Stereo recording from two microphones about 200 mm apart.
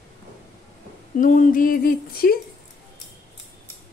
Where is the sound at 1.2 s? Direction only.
40° left (ahead or behind).